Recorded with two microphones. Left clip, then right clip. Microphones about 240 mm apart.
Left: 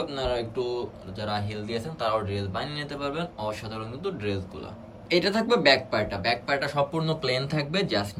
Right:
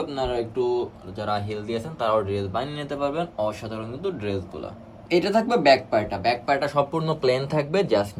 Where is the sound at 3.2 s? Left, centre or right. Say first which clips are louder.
Right 5 dB; right.